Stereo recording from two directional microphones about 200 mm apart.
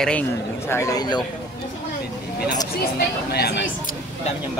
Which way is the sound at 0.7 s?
15° left (ahead or behind).